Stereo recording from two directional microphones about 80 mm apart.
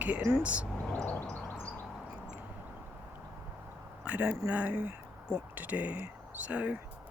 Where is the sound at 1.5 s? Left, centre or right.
Centre.